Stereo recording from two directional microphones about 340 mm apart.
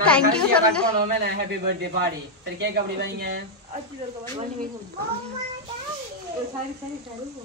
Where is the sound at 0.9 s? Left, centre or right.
Right.